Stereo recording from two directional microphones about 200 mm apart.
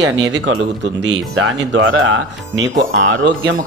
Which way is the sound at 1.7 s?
85° right.